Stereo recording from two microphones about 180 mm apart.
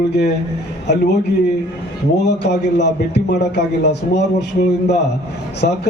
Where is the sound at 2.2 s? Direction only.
70° left (ahead or behind).